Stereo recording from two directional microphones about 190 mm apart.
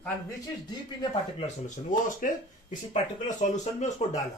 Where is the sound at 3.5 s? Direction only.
35° left (ahead or behind).